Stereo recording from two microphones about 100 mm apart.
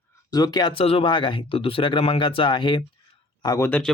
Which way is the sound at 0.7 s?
70° left (ahead or behind).